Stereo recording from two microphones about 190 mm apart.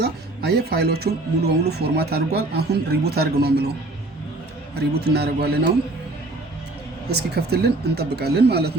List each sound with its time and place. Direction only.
0.0 s speech: 55° right (ahead or behind)
4.7 s speech: 60° right (ahead or behind)
7.1 s speech: 60° right (ahead or behind)